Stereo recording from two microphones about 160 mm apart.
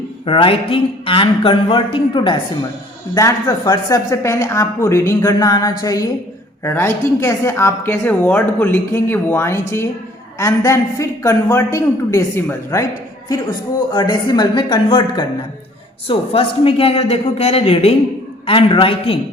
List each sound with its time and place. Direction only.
0.3 s a man's voice: 35° left (ahead or behind)
13.9 s a man's voice: 25° left (ahead or behind)